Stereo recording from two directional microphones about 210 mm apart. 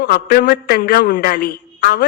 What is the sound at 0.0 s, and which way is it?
A man's voice, 45° left (ahead or behind).